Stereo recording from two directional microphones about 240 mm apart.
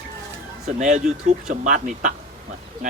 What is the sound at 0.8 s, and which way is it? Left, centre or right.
Speech, right.